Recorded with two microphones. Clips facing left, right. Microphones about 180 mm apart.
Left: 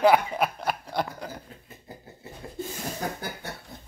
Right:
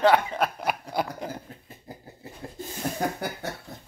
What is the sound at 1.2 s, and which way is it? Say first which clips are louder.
Chuckle: right 3 dB; 25° right (ahead or behind).